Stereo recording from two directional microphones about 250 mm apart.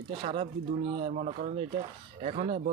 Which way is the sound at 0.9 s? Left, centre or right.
Right.